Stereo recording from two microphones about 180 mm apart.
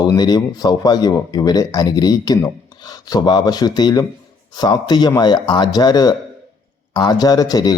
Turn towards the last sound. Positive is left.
turn(degrees=20)  # may be behind; listen again after turning